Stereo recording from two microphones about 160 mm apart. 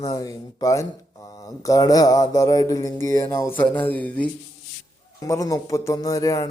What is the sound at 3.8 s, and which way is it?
Speech, 10° left (ahead or behind).